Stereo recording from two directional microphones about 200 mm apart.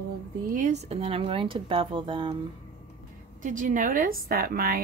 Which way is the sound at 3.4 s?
40° right (ahead or behind).